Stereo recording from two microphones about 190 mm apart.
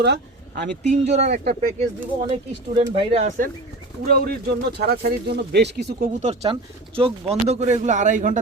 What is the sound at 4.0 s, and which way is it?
Speech, 50° right (ahead or behind).